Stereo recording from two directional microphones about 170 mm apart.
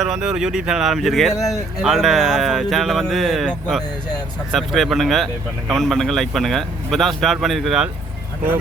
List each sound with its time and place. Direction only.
0.0 s speech: centre (ahead or behind)
1.4 s speech: 20° left (ahead or behind)
1.8 s speech: centre (ahead or behind)
4.5 s speech: centre (ahead or behind)